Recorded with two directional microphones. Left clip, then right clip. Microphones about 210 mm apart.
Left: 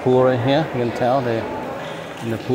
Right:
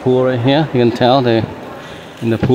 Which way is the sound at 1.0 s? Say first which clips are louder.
Right 5 dB; 50° right (ahead or behind).